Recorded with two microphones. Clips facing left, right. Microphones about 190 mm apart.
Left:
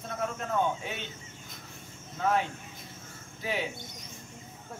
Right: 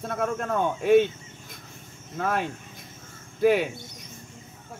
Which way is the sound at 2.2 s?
60° right (ahead or behind).